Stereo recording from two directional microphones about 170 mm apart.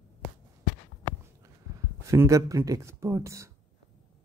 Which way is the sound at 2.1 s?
20° right (ahead or behind).